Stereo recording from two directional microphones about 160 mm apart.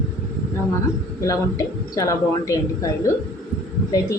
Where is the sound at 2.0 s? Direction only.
20° left (ahead or behind).